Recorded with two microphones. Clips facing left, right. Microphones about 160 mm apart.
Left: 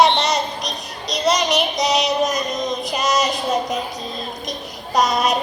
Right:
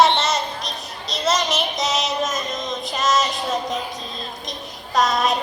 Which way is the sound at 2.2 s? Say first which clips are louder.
Left 4 dB; 20° left (ahead or behind).